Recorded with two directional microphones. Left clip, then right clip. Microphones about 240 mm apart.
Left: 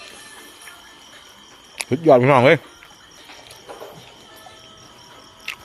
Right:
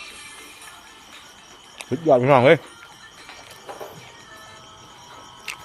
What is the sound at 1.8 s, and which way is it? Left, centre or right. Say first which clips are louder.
Speech: left 4 dB; left.